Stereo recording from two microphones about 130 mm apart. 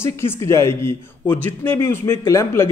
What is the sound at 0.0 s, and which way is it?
A man's voice, 20° left (ahead or behind).